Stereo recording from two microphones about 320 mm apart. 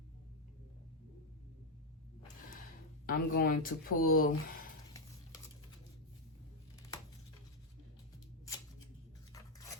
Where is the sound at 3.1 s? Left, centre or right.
Left.